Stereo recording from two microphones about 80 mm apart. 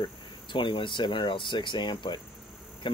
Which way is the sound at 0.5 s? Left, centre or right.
Left.